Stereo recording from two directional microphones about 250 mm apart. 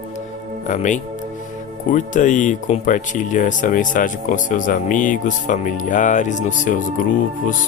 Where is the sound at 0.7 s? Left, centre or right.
Left.